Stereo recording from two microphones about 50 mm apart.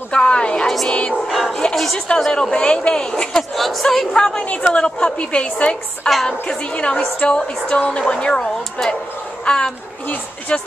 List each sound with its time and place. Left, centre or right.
0.1 s a sound: centre
0.8 s music: left
1.5 s bow-wow: centre
2.0 s a woman's voice: centre
3.5 s a woman's voice: centre; by 10.6 s left